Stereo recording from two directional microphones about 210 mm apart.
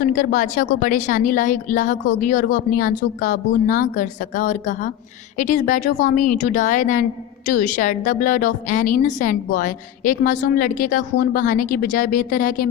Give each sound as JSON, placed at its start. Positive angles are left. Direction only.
{"t": 0.0, "sound": "a woman's voice", "side_deg": 40}